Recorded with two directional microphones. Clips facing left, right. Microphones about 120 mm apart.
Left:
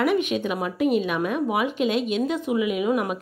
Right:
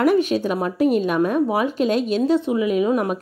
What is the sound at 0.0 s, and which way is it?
A woman's voice, 35° right (ahead or behind).